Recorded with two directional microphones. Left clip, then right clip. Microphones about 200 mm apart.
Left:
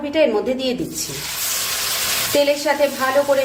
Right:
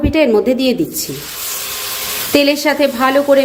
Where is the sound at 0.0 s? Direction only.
35° right (ahead or behind).